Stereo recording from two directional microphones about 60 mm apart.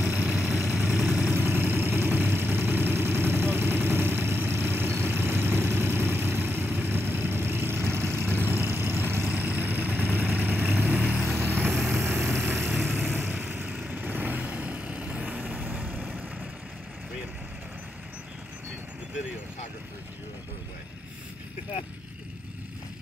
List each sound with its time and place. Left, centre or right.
0.1 s vehicle: centre
1.3 s vehicle: right
10.6 s vehicle: centre
11.1 s vehicle: right
12.9 s vehicle: right